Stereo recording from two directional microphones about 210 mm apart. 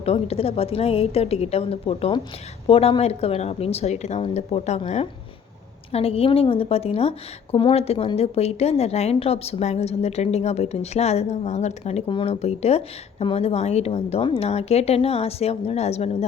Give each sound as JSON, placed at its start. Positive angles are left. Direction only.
{"t": 0.0, "sound": "a woman's voice", "side_deg": 30}